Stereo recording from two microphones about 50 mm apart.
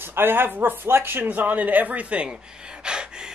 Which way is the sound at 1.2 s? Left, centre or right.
Right.